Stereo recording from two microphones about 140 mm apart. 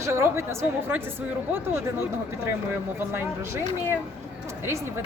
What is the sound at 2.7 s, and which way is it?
Speech, 15° right (ahead or behind).